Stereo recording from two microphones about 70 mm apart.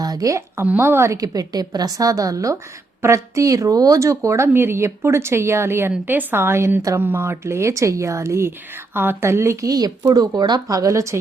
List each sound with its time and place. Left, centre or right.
0.0 s speech: right
0.6 s speech: right
1.1 s speech: right
4.4 s speech: right
9.6 s speech: right